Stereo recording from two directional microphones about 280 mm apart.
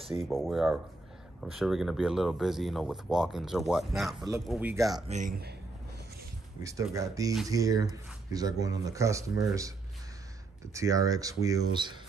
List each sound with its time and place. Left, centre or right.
0.2 s speech: centre
5.1 s speech: right
6.6 s speech: centre